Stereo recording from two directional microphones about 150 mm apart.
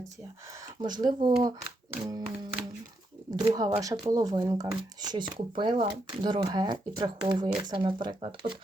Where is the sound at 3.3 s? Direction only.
25° right (ahead or behind).